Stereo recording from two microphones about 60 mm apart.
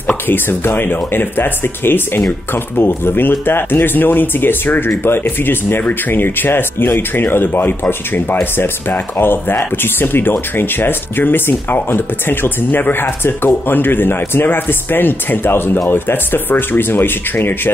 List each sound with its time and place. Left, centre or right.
0.0 s speech: left